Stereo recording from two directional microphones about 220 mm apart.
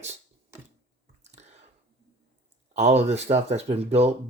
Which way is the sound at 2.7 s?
30° right (ahead or behind).